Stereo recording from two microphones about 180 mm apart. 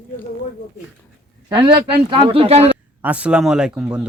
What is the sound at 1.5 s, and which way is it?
A man's voice, 25° right (ahead or behind).